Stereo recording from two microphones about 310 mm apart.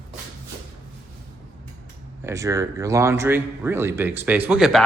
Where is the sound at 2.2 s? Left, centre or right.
Centre.